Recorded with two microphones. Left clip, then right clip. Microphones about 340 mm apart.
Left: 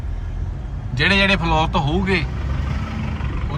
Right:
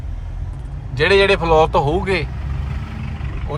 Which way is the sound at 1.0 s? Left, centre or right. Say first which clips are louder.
Right 3 dB; centre.